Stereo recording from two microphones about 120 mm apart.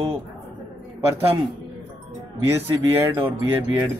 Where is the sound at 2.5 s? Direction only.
25° right (ahead or behind).